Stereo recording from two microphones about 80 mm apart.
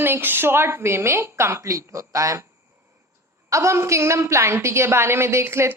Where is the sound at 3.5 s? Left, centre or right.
Right.